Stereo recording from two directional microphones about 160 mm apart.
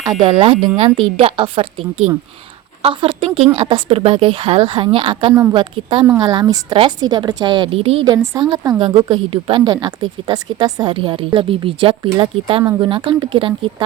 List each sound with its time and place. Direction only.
0.0 s speech: 25° right (ahead or behind)
2.8 s a woman's voice: 35° right (ahead or behind)
8.0 s a woman's voice: 20° right (ahead or behind)